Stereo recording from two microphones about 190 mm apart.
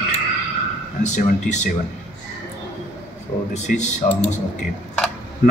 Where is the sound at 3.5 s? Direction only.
40° left (ahead or behind).